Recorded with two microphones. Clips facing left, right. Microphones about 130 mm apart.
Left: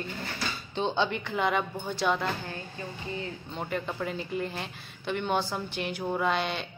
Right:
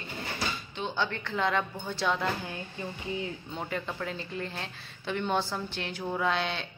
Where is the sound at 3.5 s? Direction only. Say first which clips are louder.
Left 4 dB; 5° left (ahead or behind).